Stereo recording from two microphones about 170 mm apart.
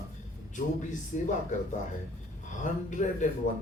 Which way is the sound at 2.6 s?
45° left (ahead or behind).